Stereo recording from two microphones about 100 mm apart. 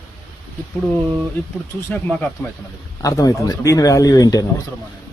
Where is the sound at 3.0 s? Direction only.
35° left (ahead or behind).